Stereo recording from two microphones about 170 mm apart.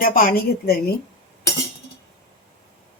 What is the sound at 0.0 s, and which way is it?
Speech, 55° left (ahead or behind).